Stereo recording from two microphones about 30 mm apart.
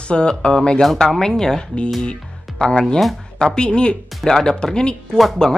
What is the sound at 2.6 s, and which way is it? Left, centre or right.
Speech, left.